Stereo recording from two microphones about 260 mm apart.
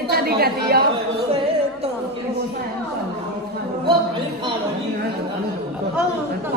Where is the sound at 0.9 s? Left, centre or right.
Right.